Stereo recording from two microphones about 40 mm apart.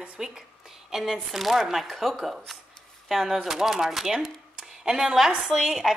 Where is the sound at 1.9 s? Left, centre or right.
Centre.